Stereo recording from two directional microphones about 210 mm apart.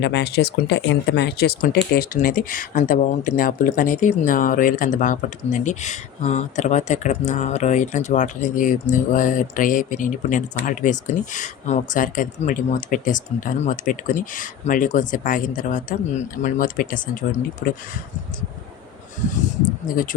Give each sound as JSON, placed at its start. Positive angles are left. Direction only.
{"t": 0.0, "sound": "speech", "side_deg": 55}